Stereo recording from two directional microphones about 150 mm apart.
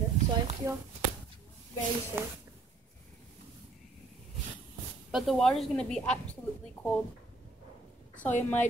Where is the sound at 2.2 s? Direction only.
15° right (ahead or behind).